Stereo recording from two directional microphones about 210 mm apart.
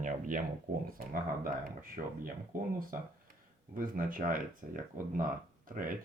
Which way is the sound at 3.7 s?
40° right (ahead or behind).